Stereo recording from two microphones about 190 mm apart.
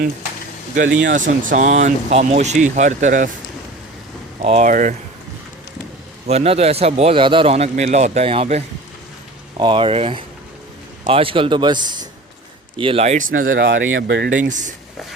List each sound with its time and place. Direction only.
1.1 s a man's voice: 45° right (ahead or behind)
4.4 s a man's voice: 40° right (ahead or behind)
6.2 s a man's voice: 35° right (ahead or behind)
13.5 s speech: 75° right (ahead or behind)
14.3 s speech: 45° right (ahead or behind)